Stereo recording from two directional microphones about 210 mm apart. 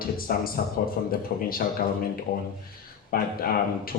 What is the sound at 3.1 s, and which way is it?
Speech, 45° left (ahead or behind).